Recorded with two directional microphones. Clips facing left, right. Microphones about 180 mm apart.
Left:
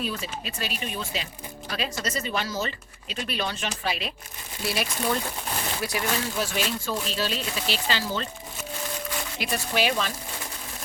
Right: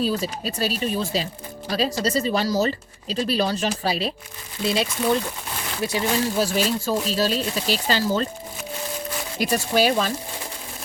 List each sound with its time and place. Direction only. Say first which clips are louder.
0.0 s speech: right 8 dB; 35° right (ahead or behind)
4.6 s speech: right 5 dB; 25° right (ahead or behind)
6.3 s speech: right 6 dB; 35° right (ahead or behind)
9.4 s speech: right 7 dB; 40° right (ahead or behind)